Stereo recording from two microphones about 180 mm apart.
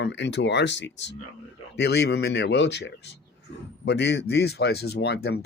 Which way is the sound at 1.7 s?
65° left (ahead or behind).